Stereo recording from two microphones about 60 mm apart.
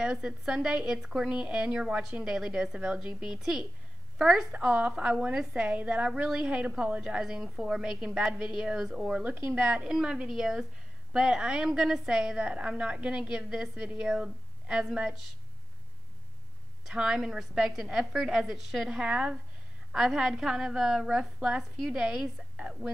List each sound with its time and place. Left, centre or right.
0.0 s a woman's voice: centre
4.5 s a woman's voice: centre
16.8 s a woman's voice: centre